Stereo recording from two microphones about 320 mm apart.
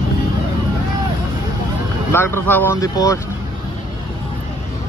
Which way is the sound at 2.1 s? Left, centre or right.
Centre.